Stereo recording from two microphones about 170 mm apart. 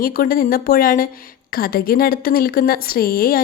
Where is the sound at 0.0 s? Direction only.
60° left (ahead or behind).